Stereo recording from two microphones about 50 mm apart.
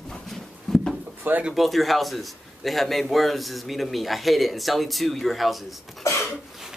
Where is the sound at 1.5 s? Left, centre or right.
Centre.